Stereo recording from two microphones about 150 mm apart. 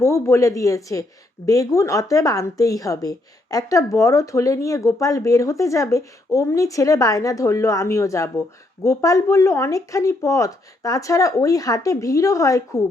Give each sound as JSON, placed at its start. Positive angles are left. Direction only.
{"t": 0.0, "sound": "speech", "side_deg": 20}